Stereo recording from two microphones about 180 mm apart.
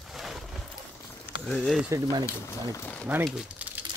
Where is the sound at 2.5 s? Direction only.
15° left (ahead or behind).